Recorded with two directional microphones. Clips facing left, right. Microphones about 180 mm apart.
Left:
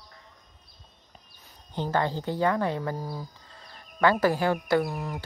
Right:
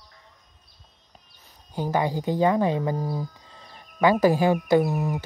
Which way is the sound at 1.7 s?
10° right (ahead or behind).